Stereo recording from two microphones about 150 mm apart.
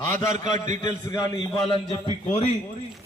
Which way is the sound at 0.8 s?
25° left (ahead or behind).